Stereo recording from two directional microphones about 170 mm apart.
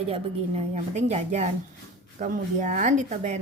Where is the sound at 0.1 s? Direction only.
40° right (ahead or behind).